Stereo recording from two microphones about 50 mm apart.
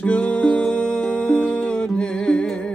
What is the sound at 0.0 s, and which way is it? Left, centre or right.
Music, left.